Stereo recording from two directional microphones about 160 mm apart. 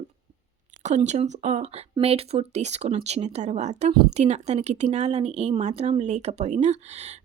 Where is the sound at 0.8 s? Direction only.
45° right (ahead or behind).